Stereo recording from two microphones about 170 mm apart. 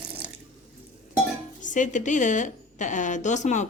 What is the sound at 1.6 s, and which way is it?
A woman's voice, 50° left (ahead or behind).